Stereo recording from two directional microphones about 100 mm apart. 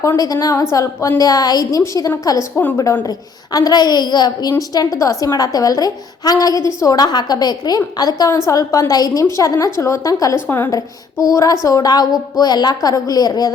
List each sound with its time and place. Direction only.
0.2 s a woman's voice: 40° left (ahead or behind)
0.5 s a woman's voice: 30° left (ahead or behind)
10.4 s a woman's voice: 20° left (ahead or behind)
10.7 s a woman's voice: 35° left (ahead or behind)